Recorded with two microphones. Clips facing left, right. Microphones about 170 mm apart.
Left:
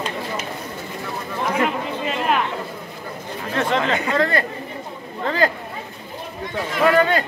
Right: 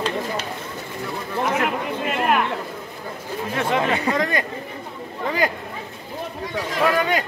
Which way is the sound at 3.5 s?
10° right (ahead or behind).